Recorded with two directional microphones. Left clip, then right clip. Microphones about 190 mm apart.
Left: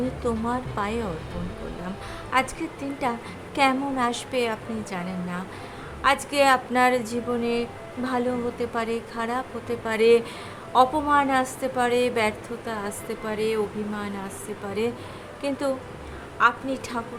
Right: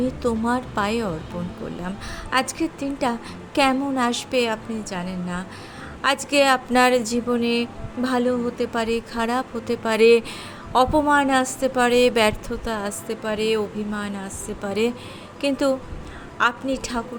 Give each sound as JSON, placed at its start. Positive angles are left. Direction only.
{"t": 0.2, "sound": "a woman's voice", "side_deg": -30}
{"t": 2.3, "sound": "a woman's voice", "side_deg": -30}
{"t": 15.4, "sound": "a woman's voice", "side_deg": -30}